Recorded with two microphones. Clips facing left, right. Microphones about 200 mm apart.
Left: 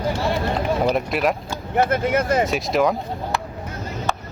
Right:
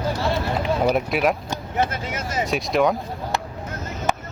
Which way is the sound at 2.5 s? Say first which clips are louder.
Even; centre (ahead or behind).